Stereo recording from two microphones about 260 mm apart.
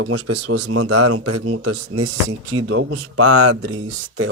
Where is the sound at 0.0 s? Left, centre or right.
Right.